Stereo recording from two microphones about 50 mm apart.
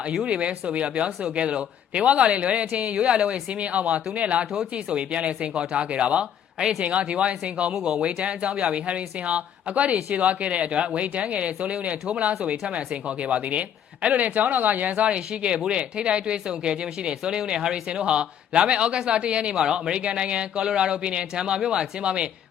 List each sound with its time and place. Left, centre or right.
0.1 s speech: centre